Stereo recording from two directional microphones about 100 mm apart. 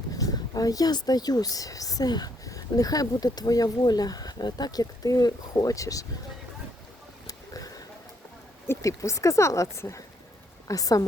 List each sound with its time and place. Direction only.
0.2 s speech: 40° left (ahead or behind)
7.3 s a sound: 35° left (ahead or behind)
8.6 s speech: 25° left (ahead or behind)